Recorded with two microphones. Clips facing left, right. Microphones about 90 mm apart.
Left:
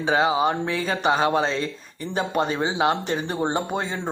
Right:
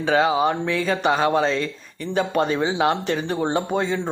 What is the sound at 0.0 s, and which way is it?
Speech, 20° left (ahead or behind).